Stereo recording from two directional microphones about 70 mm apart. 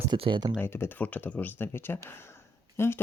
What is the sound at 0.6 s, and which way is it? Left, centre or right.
Speech, left.